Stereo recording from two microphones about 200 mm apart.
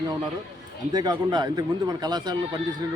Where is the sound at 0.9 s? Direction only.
20° right (ahead or behind).